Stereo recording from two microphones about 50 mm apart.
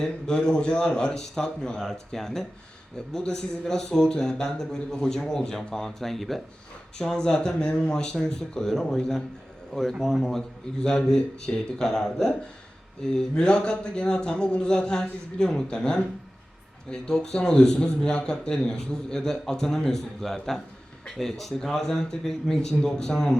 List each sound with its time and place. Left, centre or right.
0.0 s speech: centre